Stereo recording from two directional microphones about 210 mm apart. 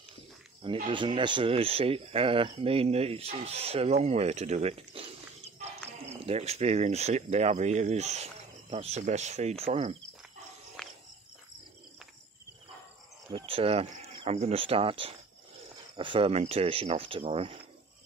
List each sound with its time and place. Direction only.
0.8 s speech: 25° right (ahead or behind)
10.8 s cricket: 5° left (ahead or behind)
13.3 s speech: 25° right (ahead or behind)